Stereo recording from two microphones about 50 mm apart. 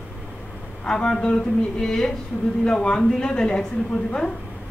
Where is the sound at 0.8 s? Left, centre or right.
Centre.